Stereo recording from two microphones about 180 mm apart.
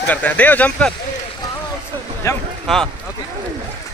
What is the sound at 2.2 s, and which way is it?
Speech, 15° left (ahead or behind).